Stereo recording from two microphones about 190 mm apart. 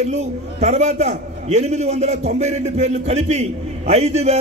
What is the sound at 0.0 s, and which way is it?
A man's voice, 35° right (ahead or behind).